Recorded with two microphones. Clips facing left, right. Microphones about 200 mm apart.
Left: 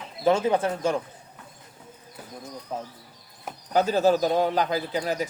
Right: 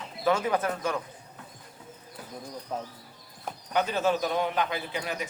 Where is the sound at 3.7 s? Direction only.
35° left (ahead or behind).